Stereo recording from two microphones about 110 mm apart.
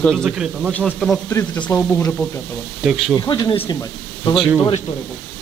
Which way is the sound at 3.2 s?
35° left (ahead or behind).